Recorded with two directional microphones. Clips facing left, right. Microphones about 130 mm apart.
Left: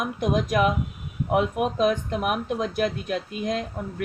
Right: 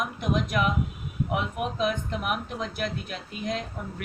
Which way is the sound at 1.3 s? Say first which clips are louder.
Left 8 dB; 45° left (ahead or behind).